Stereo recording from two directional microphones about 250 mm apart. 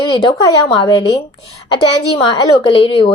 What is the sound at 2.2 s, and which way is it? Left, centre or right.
Speech, centre.